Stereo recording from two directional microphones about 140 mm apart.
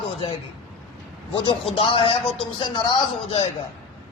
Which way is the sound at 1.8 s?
40° left (ahead or behind).